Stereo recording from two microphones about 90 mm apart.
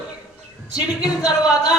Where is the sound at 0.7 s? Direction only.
45° left (ahead or behind).